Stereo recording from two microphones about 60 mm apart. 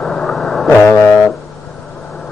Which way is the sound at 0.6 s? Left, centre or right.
Left.